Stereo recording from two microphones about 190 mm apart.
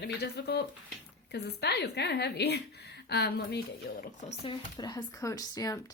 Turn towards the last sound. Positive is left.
turn(degrees=20)  # may be behind; listen again after turning